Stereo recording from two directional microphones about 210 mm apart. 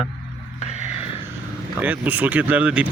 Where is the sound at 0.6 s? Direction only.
30° left (ahead or behind).